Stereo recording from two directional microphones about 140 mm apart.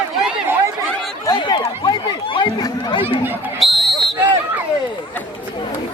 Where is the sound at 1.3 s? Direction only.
30° left (ahead or behind).